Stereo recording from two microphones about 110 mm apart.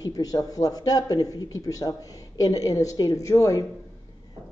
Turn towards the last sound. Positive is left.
turn(degrees=30)  # may be behind; listen again after turning